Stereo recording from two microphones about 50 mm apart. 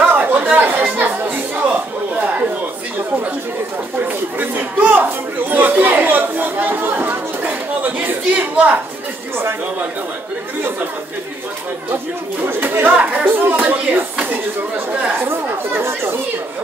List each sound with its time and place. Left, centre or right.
0.0 s chatter: right
4.0 s chatter: right
12.4 s speech: right
12.9 s speech: right
13.3 s speech: right
15.7 s chatter: right